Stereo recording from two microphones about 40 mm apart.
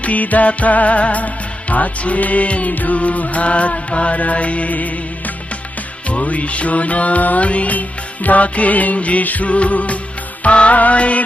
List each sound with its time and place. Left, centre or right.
0.0 s music: left